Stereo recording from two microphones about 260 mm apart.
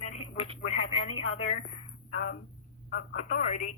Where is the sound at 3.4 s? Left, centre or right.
Left.